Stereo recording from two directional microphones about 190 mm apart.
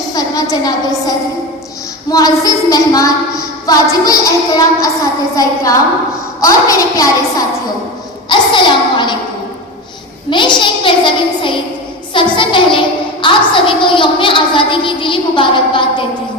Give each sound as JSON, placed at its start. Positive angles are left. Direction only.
{"t": 0.1, "sound": "a woman's voice", "side_deg": 20}
{"t": 6.4, "sound": "a woman's voice", "side_deg": 20}
{"t": 10.2, "sound": "a woman's voice", "side_deg": 25}